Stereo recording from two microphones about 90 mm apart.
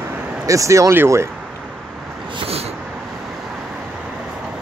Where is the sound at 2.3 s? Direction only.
90° right.